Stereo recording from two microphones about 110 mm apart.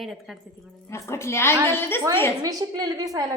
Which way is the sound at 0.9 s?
25° left (ahead or behind).